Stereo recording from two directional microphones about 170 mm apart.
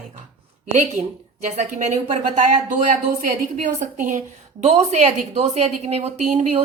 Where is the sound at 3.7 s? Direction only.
50° right (ahead or behind).